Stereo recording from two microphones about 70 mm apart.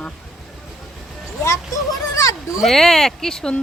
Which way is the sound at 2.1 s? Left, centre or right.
Left.